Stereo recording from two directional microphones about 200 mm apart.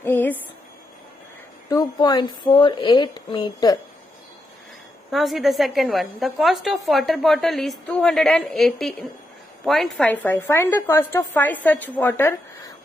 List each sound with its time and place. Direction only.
0.0 s a sound: 10° left (ahead or behind)
1.7 s a woman's voice: 20° left (ahead or behind)
5.1 s a woman's voice: centre (ahead or behind)